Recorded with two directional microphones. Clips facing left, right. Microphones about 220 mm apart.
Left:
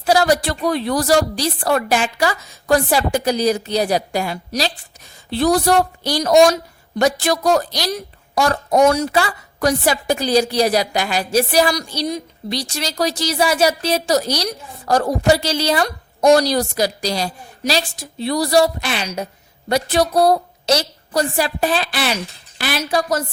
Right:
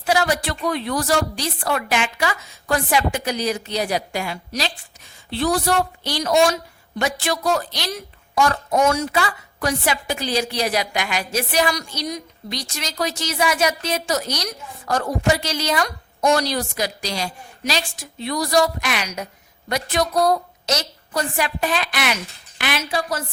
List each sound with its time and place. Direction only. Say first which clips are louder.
0.0 s a woman's voice: left 5 dB; 35° left (ahead or behind)